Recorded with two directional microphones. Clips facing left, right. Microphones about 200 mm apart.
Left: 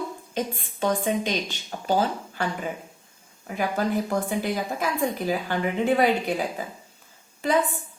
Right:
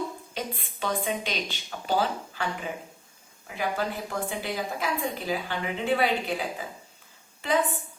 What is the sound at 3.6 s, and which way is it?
Speech, 45° left (ahead or behind).